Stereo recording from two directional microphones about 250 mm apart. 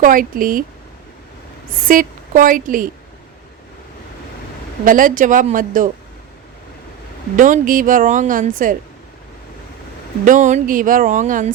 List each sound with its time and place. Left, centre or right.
0.0 s a woman's voice: right
1.9 s a woman's voice: right
4.9 s a woman's voice: right
7.3 s a woman's voice: right
10.2 s a woman's voice: right